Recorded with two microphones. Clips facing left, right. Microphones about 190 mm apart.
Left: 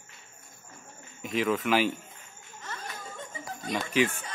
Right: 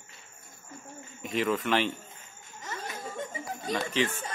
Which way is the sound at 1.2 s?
Centre (ahead or behind).